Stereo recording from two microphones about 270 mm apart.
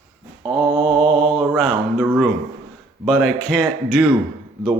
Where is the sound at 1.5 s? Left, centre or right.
Centre.